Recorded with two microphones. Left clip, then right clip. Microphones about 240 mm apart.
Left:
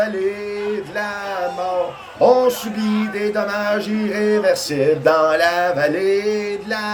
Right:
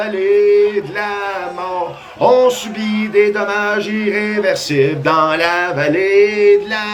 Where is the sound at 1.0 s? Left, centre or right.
Left.